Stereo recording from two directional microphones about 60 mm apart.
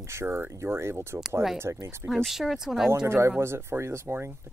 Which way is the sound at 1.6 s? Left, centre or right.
Right.